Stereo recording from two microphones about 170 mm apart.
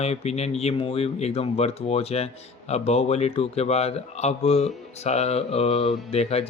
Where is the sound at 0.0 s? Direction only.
35° left (ahead or behind).